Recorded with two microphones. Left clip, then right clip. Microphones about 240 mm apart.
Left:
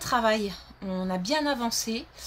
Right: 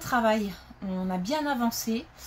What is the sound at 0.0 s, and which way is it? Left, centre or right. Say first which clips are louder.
A woman's voice: left 1 dB; left.